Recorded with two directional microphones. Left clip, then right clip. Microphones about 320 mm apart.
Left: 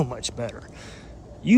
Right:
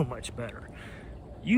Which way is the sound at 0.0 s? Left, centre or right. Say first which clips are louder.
Left 6 dB; centre.